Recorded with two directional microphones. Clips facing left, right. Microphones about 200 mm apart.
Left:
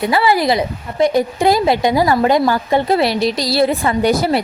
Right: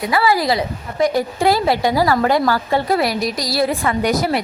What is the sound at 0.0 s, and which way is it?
A woman's voice, 25° left (ahead or behind).